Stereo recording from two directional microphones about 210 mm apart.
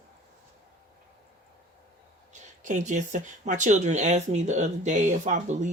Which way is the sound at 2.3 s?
35° right (ahead or behind).